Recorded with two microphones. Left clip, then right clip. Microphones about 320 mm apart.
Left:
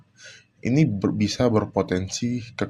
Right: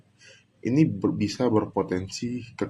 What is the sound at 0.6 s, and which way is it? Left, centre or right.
Speech, left.